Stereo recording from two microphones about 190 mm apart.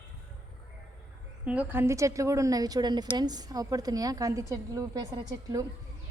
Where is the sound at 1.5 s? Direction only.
10° right (ahead or behind).